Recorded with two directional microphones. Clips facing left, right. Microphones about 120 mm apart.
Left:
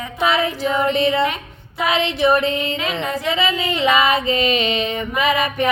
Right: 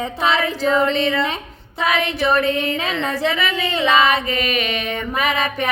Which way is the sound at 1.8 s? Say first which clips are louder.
Left 2 dB; 25° left (ahead or behind).